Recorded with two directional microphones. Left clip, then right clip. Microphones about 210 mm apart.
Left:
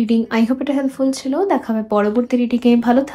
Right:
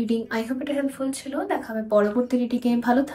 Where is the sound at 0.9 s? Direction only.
20° left (ahead or behind).